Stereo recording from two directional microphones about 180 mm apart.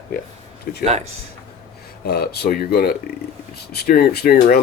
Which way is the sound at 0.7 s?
55° left (ahead or behind).